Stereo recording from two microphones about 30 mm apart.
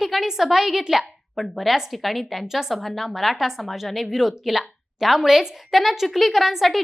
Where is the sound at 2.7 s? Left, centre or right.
Centre.